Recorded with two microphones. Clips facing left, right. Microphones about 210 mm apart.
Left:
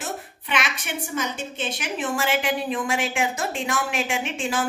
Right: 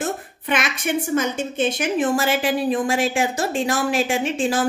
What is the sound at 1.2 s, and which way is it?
A woman's voice, 45° right (ahead or behind).